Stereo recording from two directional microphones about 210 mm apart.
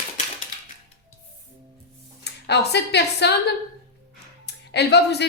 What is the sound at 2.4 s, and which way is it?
Speech, 55° left (ahead or behind).